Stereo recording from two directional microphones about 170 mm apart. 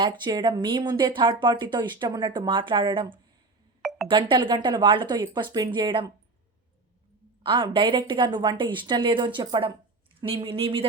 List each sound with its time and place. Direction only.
0.0 s speech: 25° right (ahead or behind)
3.8 s telephone dialing: centre (ahead or behind)
4.1 s speech: 30° right (ahead or behind)
7.4 s speech: 30° right (ahead or behind)